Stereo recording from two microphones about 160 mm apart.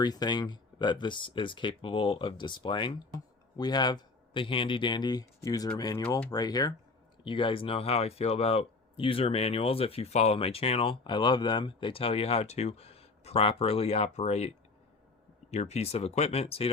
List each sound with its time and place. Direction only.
0.0 s speech: 25° left (ahead or behind)